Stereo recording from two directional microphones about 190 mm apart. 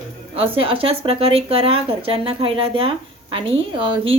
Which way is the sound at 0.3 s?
30° right (ahead or behind).